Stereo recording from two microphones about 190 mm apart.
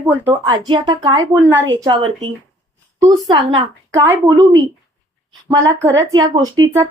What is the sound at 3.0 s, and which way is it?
Speech, 20° right (ahead or behind).